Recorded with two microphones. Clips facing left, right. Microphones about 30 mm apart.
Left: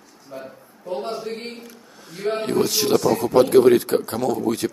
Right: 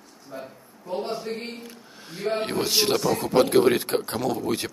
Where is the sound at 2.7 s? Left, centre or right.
Right.